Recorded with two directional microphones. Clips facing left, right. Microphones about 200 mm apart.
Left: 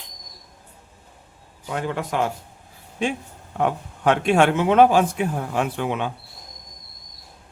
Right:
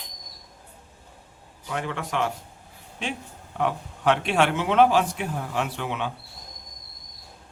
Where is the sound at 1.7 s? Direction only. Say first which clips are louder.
Left 4 dB; 35° left (ahead or behind).